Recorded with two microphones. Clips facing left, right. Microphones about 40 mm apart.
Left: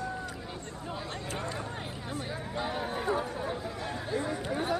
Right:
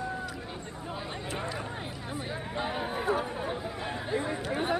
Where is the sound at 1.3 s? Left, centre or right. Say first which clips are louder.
Right 1 dB; centre.